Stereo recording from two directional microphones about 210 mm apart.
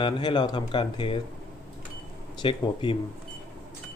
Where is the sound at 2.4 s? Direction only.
20° left (ahead or behind).